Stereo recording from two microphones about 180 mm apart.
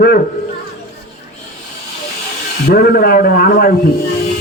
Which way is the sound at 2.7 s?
60° left (ahead or behind).